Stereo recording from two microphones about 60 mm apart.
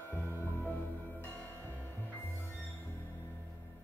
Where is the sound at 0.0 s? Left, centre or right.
Left.